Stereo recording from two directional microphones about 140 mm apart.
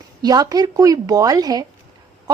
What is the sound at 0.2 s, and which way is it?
Speech, 25° right (ahead or behind).